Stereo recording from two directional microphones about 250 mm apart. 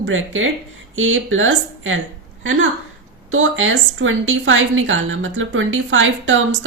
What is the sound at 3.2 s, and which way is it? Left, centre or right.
A woman's voice, right.